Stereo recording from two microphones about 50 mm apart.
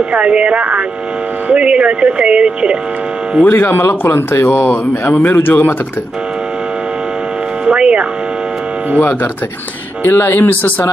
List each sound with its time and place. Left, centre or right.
0.1 s speech: right
3.4 s speech: left
7.6 s speech: right
10.0 s speech: left